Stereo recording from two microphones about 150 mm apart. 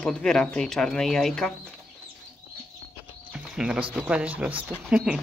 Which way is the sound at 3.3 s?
5° right (ahead or behind).